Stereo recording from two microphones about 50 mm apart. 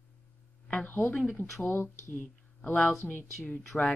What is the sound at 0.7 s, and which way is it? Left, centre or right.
Speech, left.